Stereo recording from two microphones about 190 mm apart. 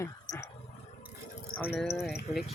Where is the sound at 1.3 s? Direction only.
50° left (ahead or behind).